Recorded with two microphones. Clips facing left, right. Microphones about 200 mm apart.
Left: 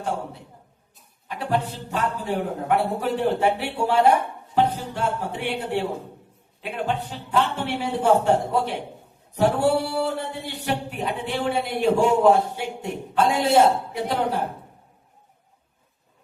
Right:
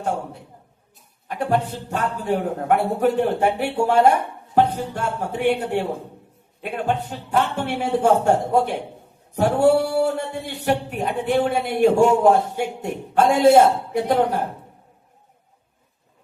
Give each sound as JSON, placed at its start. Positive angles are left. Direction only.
{"t": 1.3, "sound": "speech", "side_deg": -50}